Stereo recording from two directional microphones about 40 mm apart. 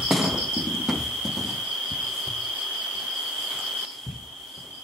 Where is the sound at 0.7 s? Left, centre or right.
Centre.